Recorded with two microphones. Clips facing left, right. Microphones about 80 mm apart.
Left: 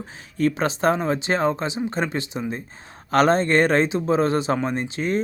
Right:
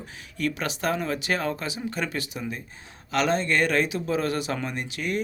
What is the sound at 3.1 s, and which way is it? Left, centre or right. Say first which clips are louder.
Speech: left 6 dB; left.